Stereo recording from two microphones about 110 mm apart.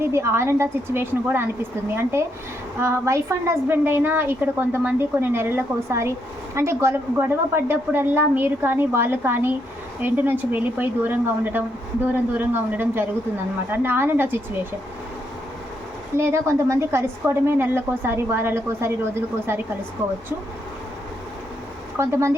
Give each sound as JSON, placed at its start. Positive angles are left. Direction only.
{"t": 0.0, "sound": "a woman's voice", "side_deg": -25}
{"t": 16.1, "sound": "a woman's voice", "side_deg": -25}
{"t": 21.9, "sound": "a woman's voice", "side_deg": -25}